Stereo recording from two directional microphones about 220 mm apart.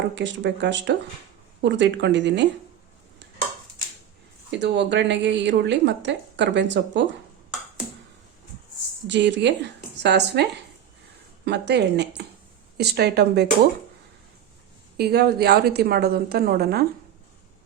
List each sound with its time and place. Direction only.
0.2 s a woman's voice: 55° right (ahead or behind)
4.5 s a woman's voice: 55° right (ahead or behind)
9.0 s a woman's voice: 55° right (ahead or behind)
14.9 s a woman's voice: 45° right (ahead or behind)